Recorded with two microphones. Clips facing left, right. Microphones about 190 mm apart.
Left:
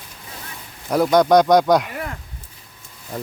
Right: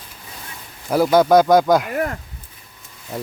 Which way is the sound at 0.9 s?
5° right (ahead or behind).